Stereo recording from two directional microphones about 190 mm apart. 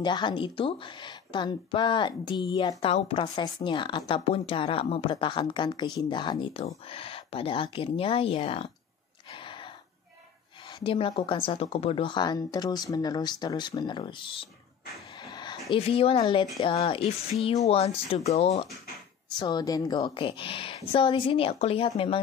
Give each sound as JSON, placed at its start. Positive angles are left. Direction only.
{"t": 0.0, "sound": "speech", "side_deg": 25}
{"t": 10.8, "sound": "speech", "side_deg": 30}
{"t": 15.2, "sound": "a sound", "side_deg": 20}
{"t": 15.7, "sound": "speech", "side_deg": 30}
{"t": 19.3, "sound": "speech", "side_deg": 20}